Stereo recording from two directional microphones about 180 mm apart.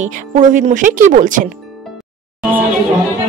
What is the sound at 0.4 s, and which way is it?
Speech, 45° right (ahead or behind).